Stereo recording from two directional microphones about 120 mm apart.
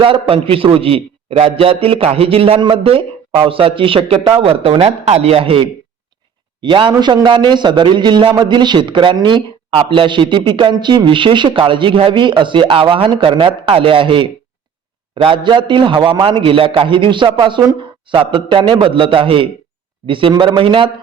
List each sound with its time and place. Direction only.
0.0 s a man's voice: 50° right (ahead or behind)
6.6 s a man's voice: 40° right (ahead or behind)